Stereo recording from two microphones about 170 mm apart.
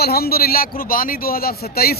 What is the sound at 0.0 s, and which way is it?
A man's voice, 65° left (ahead or behind).